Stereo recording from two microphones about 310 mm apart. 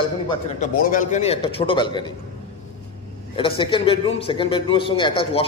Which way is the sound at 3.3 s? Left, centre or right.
Centre.